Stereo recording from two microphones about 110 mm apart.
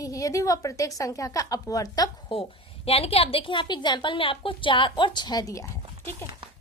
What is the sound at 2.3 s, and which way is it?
Speech, 55° left (ahead or behind).